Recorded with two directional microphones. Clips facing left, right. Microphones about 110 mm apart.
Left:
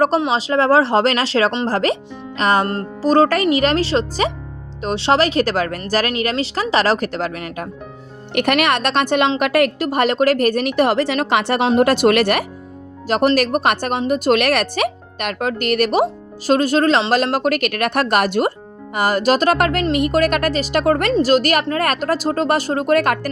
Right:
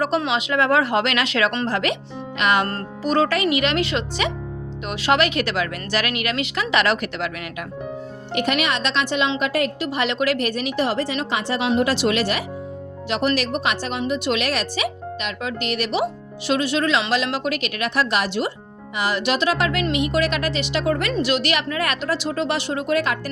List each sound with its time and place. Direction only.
0.3 s speech: 35° left (ahead or behind)
8.3 s a woman's voice: 60° left (ahead or behind)
9.4 s a woman's voice: 65° left (ahead or behind)
11.8 s a woman's voice: 55° left (ahead or behind)
13.1 s a woman's voice: 45° left (ahead or behind)
21.1 s a woman's voice: 40° left (ahead or behind)